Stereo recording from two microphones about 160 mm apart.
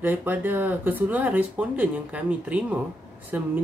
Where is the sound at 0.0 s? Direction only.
10° right (ahead or behind).